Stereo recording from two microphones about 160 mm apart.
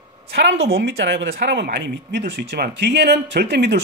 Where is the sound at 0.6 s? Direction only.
85° right.